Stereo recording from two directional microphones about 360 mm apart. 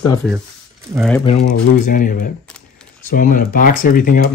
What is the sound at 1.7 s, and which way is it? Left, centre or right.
Speech, left.